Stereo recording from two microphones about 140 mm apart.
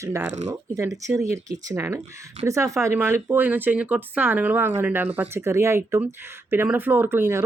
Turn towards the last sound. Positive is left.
turn(degrees=-15)  # may be behind; listen again after turning